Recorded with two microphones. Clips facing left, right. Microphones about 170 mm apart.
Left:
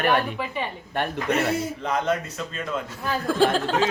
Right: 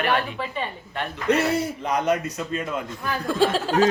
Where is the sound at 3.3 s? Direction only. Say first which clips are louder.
Left 1 dB; centre (ahead or behind).